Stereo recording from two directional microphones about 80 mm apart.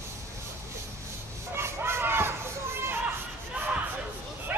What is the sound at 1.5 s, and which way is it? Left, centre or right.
Hubbub, right.